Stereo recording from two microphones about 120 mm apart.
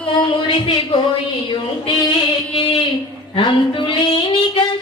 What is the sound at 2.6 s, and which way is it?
Child singing, 45° left (ahead or behind).